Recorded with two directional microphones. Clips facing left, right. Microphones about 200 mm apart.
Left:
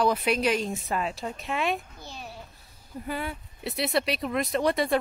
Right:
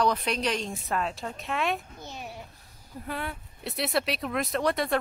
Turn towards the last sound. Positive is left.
turn(degrees=0)  # may be behind; listen again after turning